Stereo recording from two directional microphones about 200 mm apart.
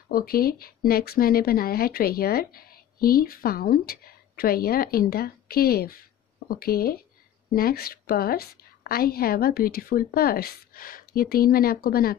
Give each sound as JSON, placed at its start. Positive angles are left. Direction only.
{"t": 0.1, "sound": "speech", "side_deg": 50}